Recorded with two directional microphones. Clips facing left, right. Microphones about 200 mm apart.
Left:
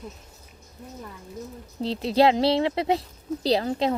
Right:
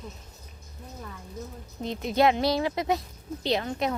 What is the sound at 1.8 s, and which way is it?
A woman's voice, 30° left (ahead or behind).